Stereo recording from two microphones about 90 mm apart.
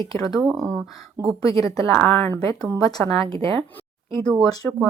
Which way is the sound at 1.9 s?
15° left (ahead or behind).